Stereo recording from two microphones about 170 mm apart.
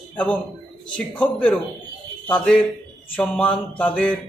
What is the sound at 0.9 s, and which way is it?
Speech, 10° left (ahead or behind).